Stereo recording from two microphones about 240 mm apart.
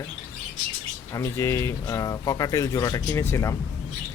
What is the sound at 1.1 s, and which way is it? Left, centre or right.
Speech, centre.